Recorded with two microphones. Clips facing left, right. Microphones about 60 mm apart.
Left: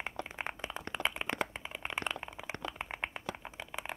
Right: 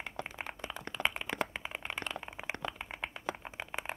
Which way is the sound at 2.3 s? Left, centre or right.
Right.